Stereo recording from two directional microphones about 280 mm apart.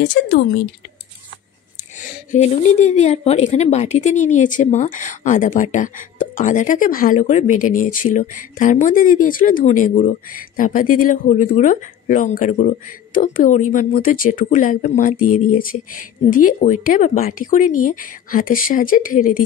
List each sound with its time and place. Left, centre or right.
0.0 s a woman's voice: left
2.0 s a woman's voice: left
15.1 s speech: left
16.3 s a woman's voice: left